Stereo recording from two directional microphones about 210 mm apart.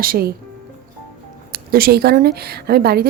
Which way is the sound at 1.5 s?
45° right (ahead or behind).